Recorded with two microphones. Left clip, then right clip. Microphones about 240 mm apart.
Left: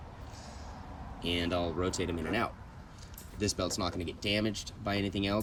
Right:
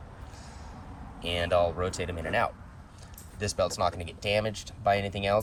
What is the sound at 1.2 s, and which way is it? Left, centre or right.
Speech, centre.